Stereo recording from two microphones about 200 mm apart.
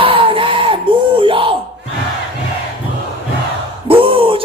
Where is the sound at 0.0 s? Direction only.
25° right (ahead or behind).